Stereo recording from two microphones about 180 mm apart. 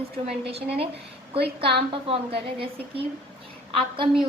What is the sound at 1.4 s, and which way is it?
Speech, 65° right (ahead or behind).